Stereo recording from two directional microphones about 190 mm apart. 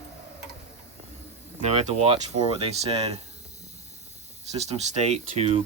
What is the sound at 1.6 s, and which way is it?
Speech, 30° right (ahead or behind).